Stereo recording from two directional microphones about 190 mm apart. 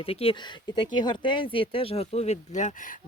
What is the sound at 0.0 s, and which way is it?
Speech, 30° left (ahead or behind).